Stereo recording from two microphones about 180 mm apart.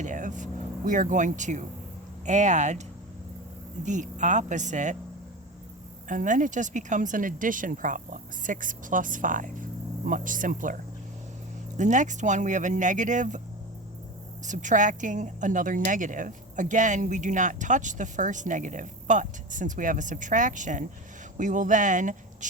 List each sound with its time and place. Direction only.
0.0 s vehicle: 45° right (ahead or behind)
0.9 s a woman's voice: 45° right (ahead or behind)
3.8 s a woman's voice: 45° right (ahead or behind)
6.1 s a woman's voice: 45° right (ahead or behind)
11.8 s a woman's voice: 45° right (ahead or behind)
14.4 s a woman's voice: 45° right (ahead or behind)